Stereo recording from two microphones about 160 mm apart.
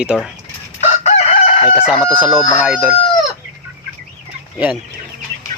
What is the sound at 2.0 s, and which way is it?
Speech, 10° right (ahead or behind).